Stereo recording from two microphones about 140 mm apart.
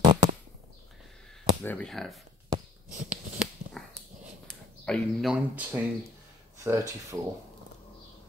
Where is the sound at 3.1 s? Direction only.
5° right (ahead or behind).